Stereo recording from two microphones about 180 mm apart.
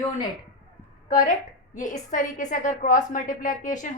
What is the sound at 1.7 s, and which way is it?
A woman's voice, 45° left (ahead or behind).